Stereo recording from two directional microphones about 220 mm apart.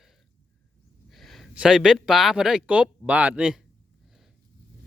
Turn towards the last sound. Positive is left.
turn(degrees=-5)  # may be behind; listen again after turning